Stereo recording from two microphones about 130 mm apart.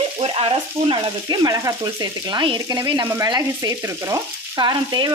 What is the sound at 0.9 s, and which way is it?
Frying, 30° right (ahead or behind).